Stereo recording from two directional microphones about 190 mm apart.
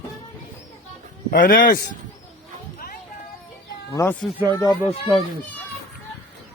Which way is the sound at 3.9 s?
15° left (ahead or behind).